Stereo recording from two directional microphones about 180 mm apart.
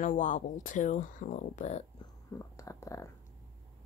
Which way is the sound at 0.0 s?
45° left (ahead or behind).